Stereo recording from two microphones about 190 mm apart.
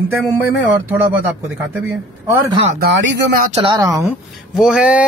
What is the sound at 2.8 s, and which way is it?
Speech, 70° right (ahead or behind).